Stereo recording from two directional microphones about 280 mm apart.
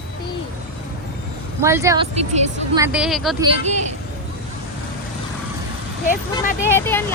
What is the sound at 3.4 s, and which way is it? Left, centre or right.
Speech, right.